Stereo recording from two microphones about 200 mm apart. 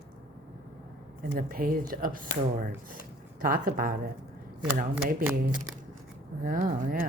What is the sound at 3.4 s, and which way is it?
Speech, 45° right (ahead or behind).